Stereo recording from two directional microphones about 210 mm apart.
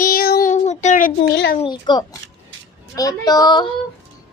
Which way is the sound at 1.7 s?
20° left (ahead or behind).